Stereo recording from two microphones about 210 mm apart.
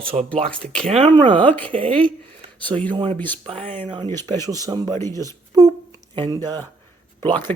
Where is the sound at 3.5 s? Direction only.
30° right (ahead or behind).